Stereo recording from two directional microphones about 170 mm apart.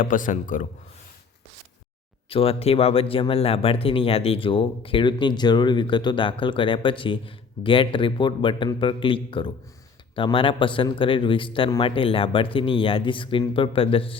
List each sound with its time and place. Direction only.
0.0 s a man's voice: 50° left (ahead or behind)
2.3 s speech: 35° left (ahead or behind)